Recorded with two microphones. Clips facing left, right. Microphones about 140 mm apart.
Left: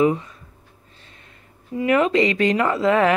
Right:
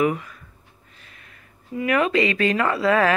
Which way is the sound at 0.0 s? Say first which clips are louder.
Left 3 dB; 25° left (ahead or behind).